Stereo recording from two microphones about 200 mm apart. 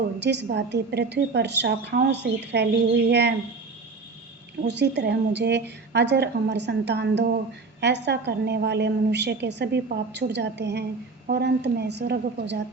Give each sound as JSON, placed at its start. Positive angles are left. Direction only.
{"t": 0.2, "sound": "a woman's voice", "side_deg": -60}
{"t": 4.6, "sound": "a woman's voice", "side_deg": -60}